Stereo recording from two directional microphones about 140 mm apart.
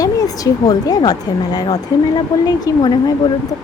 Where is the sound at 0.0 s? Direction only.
25° left (ahead or behind).